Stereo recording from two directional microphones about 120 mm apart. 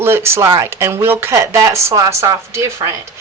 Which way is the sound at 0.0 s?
20° right (ahead or behind).